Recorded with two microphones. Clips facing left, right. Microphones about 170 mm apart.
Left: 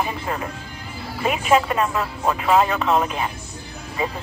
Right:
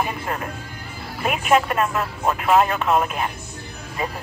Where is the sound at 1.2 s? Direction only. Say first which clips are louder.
Even; 5° right (ahead or behind).